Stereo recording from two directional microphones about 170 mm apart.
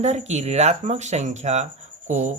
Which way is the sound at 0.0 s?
40° right (ahead or behind).